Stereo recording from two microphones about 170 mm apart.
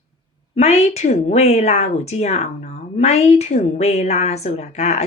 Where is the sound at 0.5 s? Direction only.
40° left (ahead or behind).